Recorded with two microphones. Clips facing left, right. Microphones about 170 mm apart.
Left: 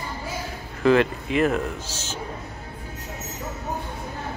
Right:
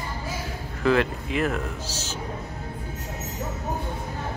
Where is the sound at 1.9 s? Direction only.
35° right (ahead or behind).